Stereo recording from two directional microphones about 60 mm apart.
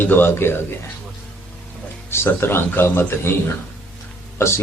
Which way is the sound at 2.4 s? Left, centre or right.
Left.